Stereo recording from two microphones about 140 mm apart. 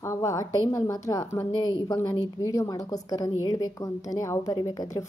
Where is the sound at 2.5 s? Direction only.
25° left (ahead or behind).